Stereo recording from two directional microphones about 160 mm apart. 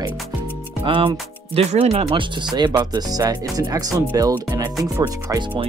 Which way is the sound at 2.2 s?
30° right (ahead or behind).